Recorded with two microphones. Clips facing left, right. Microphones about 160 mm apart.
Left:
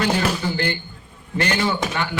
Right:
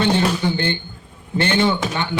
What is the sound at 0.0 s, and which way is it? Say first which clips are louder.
A man's voice: right 3 dB; 25° right (ahead or behind).